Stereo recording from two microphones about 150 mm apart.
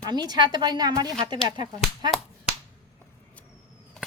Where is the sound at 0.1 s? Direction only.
30° right (ahead or behind).